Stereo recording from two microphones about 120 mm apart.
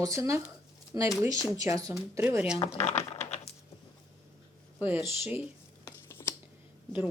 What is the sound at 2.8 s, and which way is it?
Typing, 65° left (ahead or behind).